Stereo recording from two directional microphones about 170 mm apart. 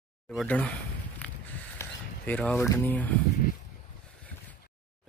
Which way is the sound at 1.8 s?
15° left (ahead or behind).